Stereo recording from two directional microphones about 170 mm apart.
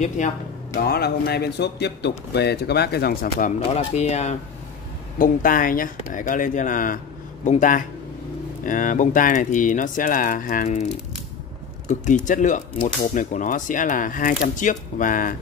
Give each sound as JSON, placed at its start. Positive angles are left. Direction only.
{"t": 0.2, "sound": "speech", "side_deg": 45}
{"t": 0.7, "sound": "a man's voice", "side_deg": 65}
{"t": 5.2, "sound": "speech", "side_deg": 55}
{"t": 11.9, "sound": "speech", "side_deg": 50}